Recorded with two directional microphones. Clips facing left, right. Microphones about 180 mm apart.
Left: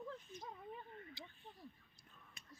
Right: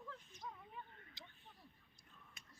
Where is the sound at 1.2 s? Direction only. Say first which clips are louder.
Left 5 dB; 10° left (ahead or behind).